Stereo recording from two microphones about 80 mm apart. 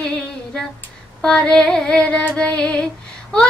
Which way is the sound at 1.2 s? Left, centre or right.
Centre.